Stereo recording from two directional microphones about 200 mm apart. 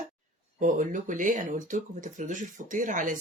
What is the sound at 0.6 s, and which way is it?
Speech, 40° right (ahead or behind).